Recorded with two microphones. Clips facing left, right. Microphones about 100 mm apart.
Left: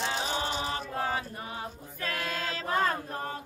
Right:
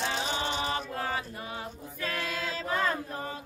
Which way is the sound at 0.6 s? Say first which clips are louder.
Even; 30° left (ahead or behind).